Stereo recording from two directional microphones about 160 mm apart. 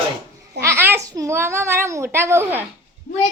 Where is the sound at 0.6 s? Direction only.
15° right (ahead or behind).